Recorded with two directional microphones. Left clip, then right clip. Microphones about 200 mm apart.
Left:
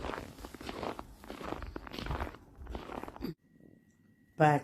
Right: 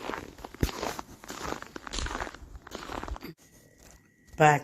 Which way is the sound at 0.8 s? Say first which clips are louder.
Right 5 dB; 25° right (ahead or behind).